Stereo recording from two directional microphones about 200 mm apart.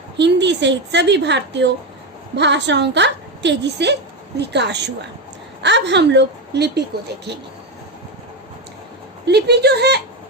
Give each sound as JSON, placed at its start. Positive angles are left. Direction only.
{"t": 0.2, "sound": "a woman's voice", "side_deg": -60}
{"t": 9.2, "sound": "a woman's voice", "side_deg": -55}